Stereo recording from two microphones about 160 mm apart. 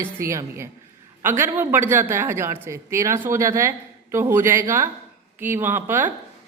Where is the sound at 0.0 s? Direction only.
20° right (ahead or behind).